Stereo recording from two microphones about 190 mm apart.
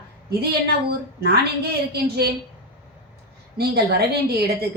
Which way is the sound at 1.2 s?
55° right (ahead or behind).